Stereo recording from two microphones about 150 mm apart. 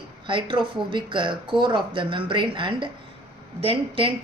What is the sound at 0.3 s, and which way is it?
Speech, 35° right (ahead or behind).